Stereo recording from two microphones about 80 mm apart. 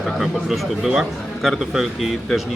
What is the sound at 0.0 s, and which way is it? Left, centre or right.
A man's voice, centre.